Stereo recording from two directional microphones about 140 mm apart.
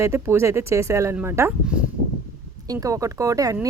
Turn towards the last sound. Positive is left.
turn(degrees=-25)  # may be behind; listen again after turning